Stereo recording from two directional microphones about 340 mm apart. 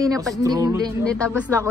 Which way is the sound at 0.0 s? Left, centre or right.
Centre.